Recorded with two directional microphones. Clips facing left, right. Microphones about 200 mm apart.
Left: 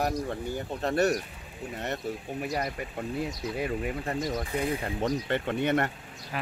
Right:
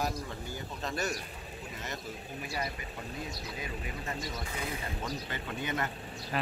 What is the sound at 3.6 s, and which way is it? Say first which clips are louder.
Speech: left 12 dB; 60° left (ahead or behind).